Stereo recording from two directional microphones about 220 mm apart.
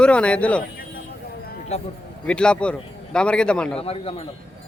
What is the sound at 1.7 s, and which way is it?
Speech, 30° left (ahead or behind).